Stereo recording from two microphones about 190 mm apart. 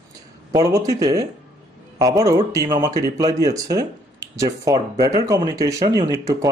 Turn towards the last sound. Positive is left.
turn(degrees=-15)  # may be behind; listen again after turning